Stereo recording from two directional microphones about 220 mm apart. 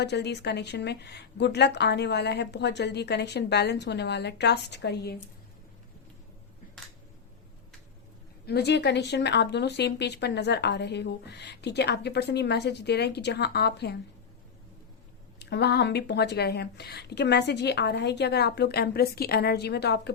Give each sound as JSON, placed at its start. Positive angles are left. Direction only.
{"t": 0.0, "sound": "speech", "side_deg": 50}
{"t": 8.4, "sound": "speech", "side_deg": 50}
{"t": 15.4, "sound": "speech", "side_deg": 50}